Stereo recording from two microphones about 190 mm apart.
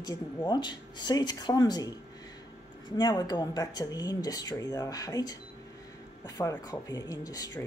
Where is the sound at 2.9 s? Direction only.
20° left (ahead or behind).